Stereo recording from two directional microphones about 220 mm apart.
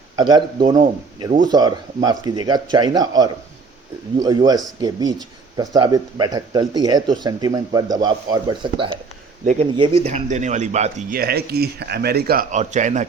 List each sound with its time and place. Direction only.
0.2 s a man's voice: 20° right (ahead or behind)
9.4 s speech: 35° right (ahead or behind)
9.7 s speech: 25° right (ahead or behind)